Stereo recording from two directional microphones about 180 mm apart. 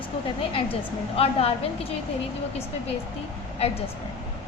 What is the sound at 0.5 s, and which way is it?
A woman's voice, 30° left (ahead or behind).